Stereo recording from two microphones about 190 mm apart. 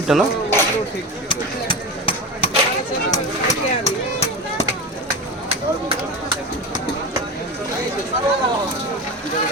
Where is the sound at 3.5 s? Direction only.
35° left (ahead or behind).